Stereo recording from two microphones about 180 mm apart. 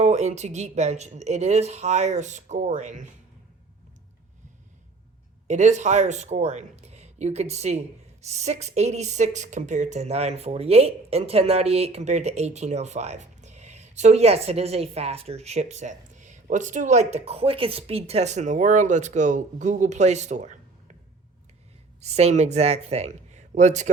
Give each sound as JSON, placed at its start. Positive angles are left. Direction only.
{"t": 0.0, "sound": "speech", "side_deg": -40}
{"t": 5.5, "sound": "speech", "side_deg": -40}
{"t": 22.0, "sound": "speech", "side_deg": -35}